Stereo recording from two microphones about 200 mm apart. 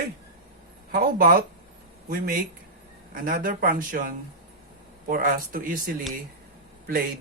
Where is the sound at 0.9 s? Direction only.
45° right (ahead or behind).